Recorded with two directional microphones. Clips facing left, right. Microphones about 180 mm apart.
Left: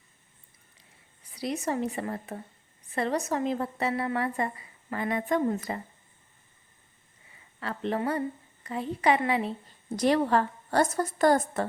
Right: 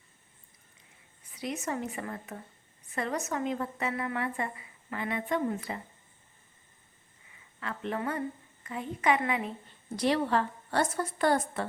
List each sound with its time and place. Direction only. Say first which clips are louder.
1.4 s a woman's voice: left 4 dB; 35° left (ahead or behind)
7.6 s a woman's voice: left 4 dB; 35° left (ahead or behind)
9.9 s a woman's voice: left 4 dB; 45° left (ahead or behind)